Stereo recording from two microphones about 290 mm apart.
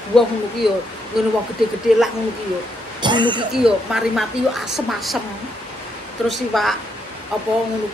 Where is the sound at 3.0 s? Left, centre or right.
Centre.